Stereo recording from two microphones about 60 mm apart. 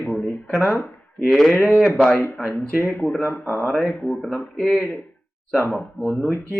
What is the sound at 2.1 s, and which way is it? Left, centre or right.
Speech, left.